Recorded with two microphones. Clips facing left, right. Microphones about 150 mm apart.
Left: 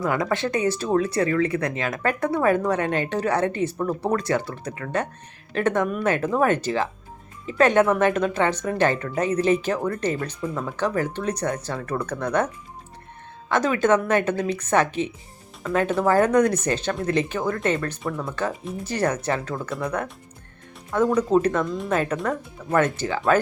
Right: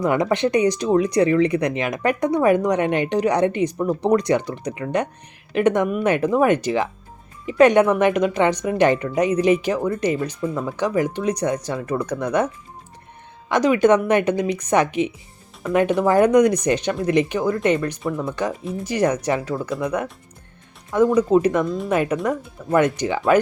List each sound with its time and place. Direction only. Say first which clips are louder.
0.0 s speech: right 5 dB; 20° right (ahead or behind)
13.5 s speech: right 4 dB; 15° right (ahead or behind)
18.0 s speech: right 4 dB; centre (ahead or behind)
18.9 s speech: right 4 dB; 10° right (ahead or behind)
21.2 s speech: right 3 dB; 10° right (ahead or behind)